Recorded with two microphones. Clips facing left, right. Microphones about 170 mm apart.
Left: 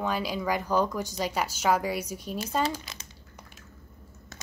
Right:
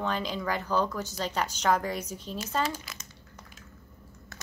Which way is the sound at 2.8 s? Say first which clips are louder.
Left 1 dB; 30° left (ahead or behind).